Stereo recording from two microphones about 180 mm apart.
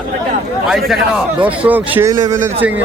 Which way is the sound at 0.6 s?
Centre (ahead or behind).